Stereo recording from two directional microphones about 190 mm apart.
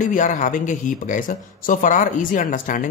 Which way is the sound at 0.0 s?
40° left (ahead or behind).